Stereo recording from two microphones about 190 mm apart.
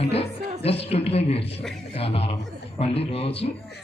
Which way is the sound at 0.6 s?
30° left (ahead or behind).